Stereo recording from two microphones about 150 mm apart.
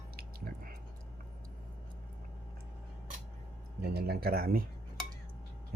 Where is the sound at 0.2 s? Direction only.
75° right (ahead or behind).